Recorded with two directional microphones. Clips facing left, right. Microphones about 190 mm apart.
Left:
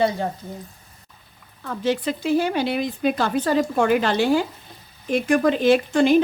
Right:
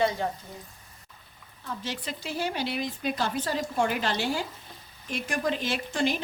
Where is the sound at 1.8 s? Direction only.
55° left (ahead or behind).